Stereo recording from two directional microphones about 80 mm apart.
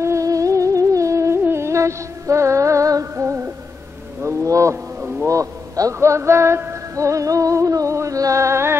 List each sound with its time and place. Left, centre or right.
0.0 s music: right
4.2 s wild animals: right
5.2 s a man's voice: right